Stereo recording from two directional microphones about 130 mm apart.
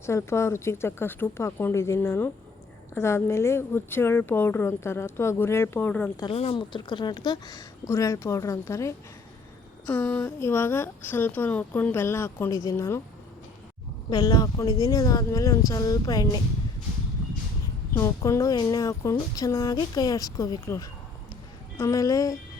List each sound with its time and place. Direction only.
0.0 s speech: 20° left (ahead or behind)
6.3 s speech: 45° left (ahead or behind); by 13.0 s 20° left (ahead or behind)
14.1 s speech: 30° left (ahead or behind)
17.9 s speech: 25° left (ahead or behind)